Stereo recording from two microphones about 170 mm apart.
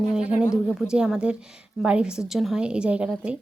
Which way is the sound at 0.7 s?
5° right (ahead or behind).